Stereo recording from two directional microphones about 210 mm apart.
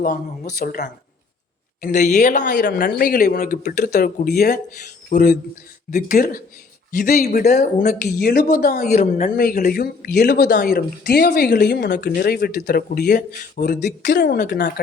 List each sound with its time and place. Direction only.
0.0 s speech: 45° left (ahead or behind)
5.1 s speech: 35° left (ahead or behind)
13.8 s speech: 55° left (ahead or behind)
14.2 s speech: 40° left (ahead or behind)